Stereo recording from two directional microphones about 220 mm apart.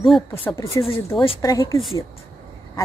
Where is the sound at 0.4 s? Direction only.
20° left (ahead or behind).